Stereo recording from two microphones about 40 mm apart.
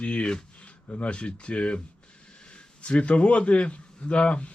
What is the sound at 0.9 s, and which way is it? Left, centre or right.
Speech, left.